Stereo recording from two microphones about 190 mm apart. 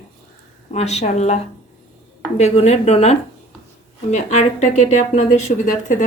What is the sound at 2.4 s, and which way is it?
A woman's voice, 35° left (ahead or behind).